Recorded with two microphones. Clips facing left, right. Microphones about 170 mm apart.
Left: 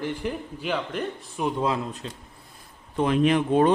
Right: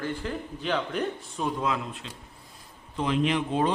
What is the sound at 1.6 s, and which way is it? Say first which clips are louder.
Speech: left 3 dB; 35° left (ahead or behind).